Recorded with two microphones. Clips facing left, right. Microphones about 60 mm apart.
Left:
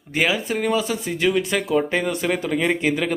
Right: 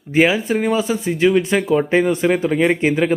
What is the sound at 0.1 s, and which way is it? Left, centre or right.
Speech, right.